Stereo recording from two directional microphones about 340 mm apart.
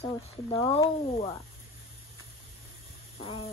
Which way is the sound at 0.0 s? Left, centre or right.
Centre.